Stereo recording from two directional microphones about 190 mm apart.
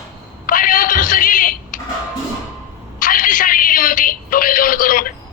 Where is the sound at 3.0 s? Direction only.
45° left (ahead or behind).